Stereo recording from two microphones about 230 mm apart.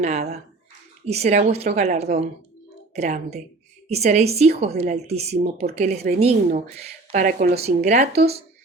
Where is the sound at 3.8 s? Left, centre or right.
Right.